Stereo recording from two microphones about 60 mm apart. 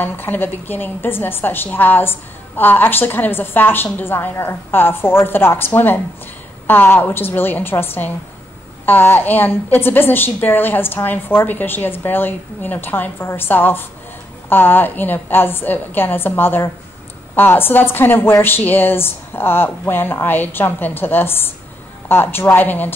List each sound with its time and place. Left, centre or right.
0.0 s a woman's voice: left